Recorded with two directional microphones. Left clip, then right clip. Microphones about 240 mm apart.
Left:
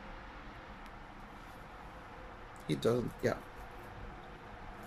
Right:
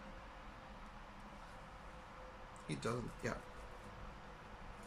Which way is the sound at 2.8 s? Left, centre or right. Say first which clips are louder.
Left 11 dB; left.